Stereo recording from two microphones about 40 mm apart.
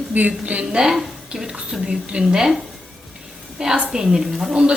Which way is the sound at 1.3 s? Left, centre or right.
Right.